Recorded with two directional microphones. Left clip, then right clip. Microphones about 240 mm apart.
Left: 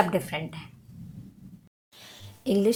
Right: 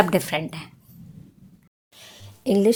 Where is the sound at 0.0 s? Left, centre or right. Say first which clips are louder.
Right 5 dB; right.